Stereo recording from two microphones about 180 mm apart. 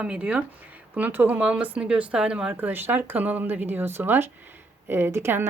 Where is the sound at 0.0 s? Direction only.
5° right (ahead or behind).